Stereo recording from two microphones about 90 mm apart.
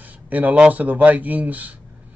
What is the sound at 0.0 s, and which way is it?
Speech, 20° right (ahead or behind).